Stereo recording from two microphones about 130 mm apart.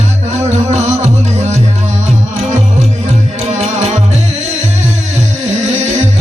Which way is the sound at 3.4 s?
55° right (ahead or behind).